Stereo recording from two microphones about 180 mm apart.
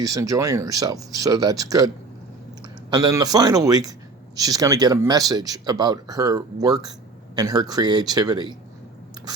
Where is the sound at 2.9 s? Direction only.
20° right (ahead or behind).